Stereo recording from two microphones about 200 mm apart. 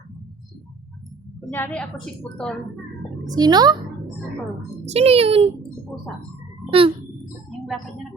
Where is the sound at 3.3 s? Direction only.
20° right (ahead or behind).